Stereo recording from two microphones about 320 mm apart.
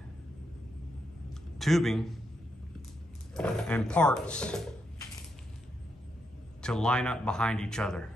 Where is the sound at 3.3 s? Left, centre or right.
Centre.